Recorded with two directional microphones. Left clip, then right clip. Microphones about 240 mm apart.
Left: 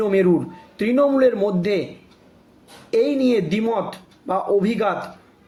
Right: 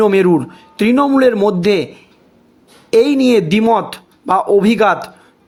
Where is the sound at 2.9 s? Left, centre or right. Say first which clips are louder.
Right 7 dB; right.